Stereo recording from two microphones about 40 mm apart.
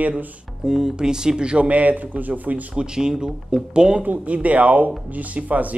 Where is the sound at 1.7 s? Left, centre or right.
Right.